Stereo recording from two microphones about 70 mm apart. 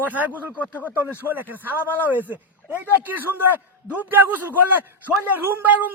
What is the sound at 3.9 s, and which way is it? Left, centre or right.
A man's voice, right.